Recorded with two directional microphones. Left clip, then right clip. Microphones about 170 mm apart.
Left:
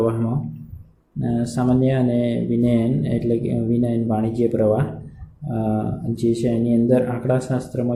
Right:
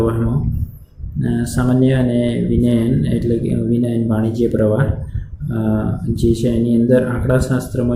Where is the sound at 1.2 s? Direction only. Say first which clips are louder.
Right 2 dB; 5° left (ahead or behind).